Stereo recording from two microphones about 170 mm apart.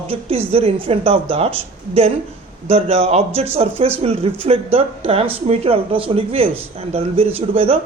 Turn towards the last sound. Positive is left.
turn(degrees=-35)  # may be behind; listen again after turning